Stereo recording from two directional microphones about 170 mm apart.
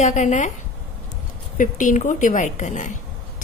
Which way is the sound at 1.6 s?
50° left (ahead or behind).